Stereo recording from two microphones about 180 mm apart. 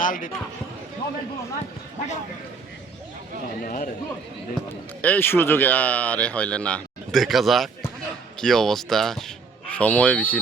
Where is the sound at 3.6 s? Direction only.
50° left (ahead or behind).